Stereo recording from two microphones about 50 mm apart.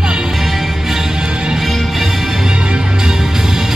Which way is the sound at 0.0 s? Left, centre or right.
Centre.